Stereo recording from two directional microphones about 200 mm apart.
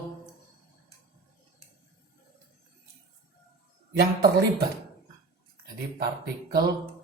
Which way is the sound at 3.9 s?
50° right (ahead or behind).